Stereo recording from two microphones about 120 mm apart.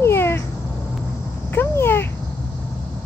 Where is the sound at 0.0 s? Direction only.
20° left (ahead or behind).